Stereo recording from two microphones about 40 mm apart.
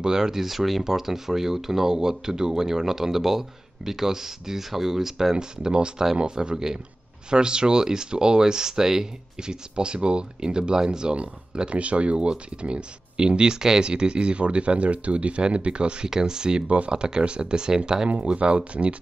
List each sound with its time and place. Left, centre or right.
0.0 s speech: centre
16.6 s speech: right